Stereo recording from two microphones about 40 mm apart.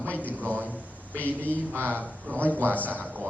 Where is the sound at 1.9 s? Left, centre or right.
Right.